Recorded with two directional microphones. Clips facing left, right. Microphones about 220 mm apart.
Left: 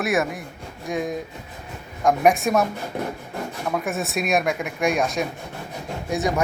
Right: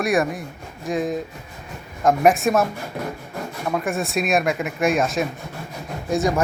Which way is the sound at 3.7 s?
Centre (ahead or behind).